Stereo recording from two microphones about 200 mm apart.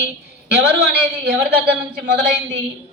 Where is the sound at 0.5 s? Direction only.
55° right (ahead or behind).